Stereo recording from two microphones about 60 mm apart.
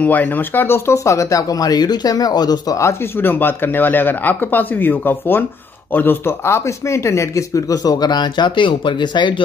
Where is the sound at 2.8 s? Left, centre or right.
Left.